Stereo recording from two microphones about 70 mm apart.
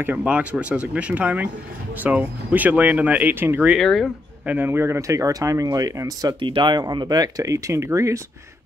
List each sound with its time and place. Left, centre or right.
0.0 s speech: right
3.7 s speech: centre
4.5 s speech: right